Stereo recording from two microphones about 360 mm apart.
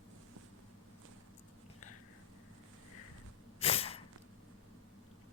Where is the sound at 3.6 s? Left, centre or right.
Centre.